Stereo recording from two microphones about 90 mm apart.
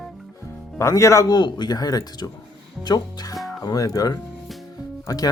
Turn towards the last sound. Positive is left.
turn(degrees=45)  # may be behind; listen again after turning